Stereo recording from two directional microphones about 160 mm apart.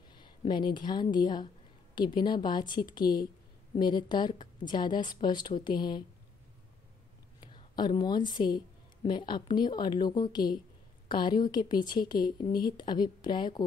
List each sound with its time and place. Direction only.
0.1 s speech: 30° left (ahead or behind)
7.3 s a woman's voice: 25° left (ahead or behind)